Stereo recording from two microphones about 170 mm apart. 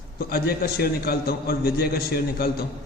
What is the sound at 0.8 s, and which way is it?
A man's voice, 65° left (ahead or behind).